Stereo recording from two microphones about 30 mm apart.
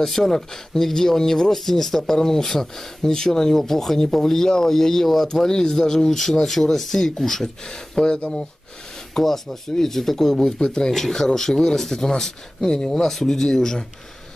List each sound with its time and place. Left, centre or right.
0.0 s speech: centre
5.5 s speech: left
9.1 s speech: centre